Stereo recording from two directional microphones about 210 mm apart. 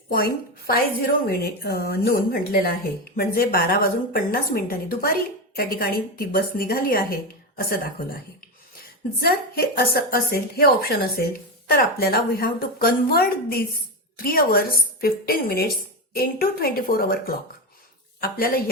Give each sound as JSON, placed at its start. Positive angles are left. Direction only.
{"t": 0.1, "sound": "a woman's voice", "side_deg": 45}